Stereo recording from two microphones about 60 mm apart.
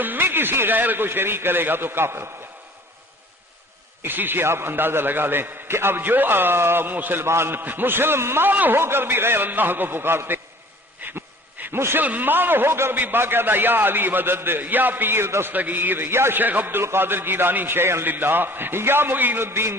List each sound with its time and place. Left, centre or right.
0.0 s a man's voice: right
4.0 s a man's voice: right
7.3 s a man's voice: right
11.0 s a sound: right
11.6 s a man's voice: right
12.0 s a man's voice: right
15.5 s a man's voice: right
16.4 s a man's voice: right